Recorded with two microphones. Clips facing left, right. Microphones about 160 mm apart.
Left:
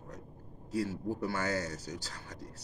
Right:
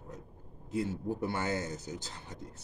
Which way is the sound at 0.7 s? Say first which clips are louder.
Even; 20° right (ahead or behind).